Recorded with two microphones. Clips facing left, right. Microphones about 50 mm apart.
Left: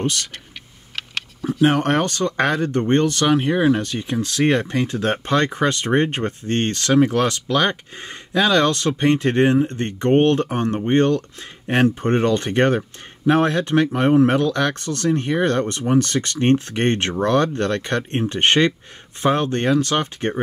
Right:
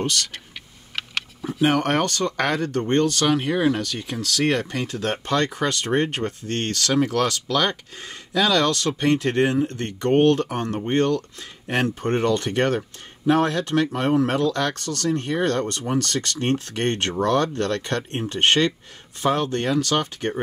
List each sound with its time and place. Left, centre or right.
0.9 s a sound: centre
1.7 s speech: centre
2.0 s speech: left